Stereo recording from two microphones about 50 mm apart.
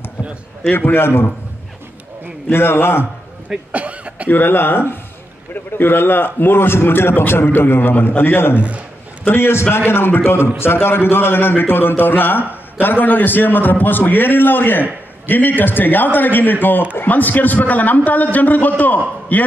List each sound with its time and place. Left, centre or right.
0.7 s a man's voice: left
2.5 s a man's voice: left
3.4 s cough: right
4.3 s a man's voice: left